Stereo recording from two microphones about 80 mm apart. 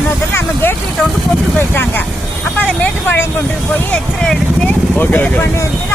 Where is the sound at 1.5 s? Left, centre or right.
Left.